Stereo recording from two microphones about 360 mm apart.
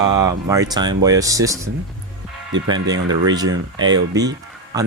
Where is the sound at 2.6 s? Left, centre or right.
Centre.